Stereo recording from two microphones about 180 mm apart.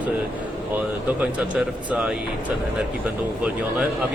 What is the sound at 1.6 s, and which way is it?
Speech, 5° right (ahead or behind).